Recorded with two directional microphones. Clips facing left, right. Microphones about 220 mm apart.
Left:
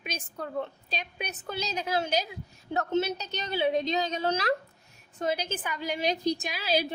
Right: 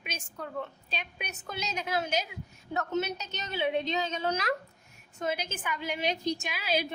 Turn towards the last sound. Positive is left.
turn(degrees=35)  # may be behind; listen again after turning